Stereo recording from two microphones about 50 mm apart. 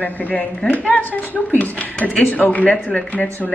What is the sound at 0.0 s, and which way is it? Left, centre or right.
A woman's voice, left.